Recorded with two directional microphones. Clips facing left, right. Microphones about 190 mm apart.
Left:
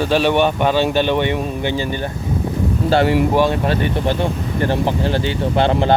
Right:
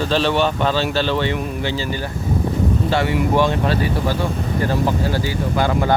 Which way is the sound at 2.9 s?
35° left (ahead or behind).